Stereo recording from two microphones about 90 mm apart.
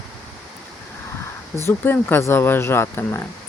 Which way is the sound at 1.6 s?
25° left (ahead or behind).